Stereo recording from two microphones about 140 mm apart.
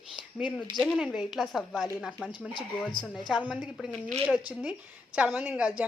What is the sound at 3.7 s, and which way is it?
Speech, 5° left (ahead or behind).